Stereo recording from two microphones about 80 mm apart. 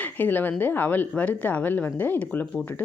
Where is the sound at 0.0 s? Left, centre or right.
Left.